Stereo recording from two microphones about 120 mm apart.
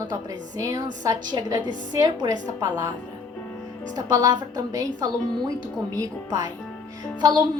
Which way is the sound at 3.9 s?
30° right (ahead or behind).